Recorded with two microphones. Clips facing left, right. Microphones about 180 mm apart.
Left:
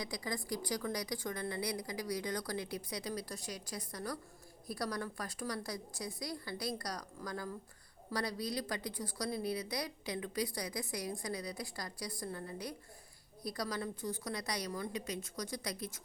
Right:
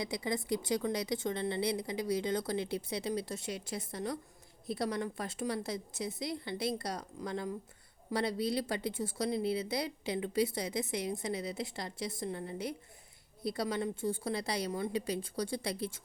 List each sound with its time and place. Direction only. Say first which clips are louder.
0.0 s speech: right 5 dB; 25° right (ahead or behind)